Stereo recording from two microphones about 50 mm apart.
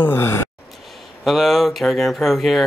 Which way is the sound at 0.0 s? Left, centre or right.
Left.